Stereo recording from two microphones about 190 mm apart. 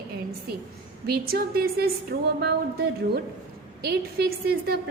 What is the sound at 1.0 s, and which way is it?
A woman's voice, 55° right (ahead or behind).